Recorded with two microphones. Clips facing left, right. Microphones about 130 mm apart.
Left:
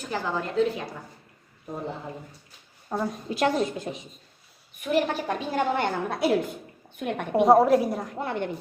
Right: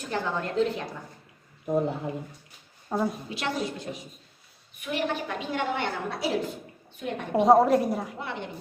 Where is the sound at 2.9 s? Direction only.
5° right (ahead or behind).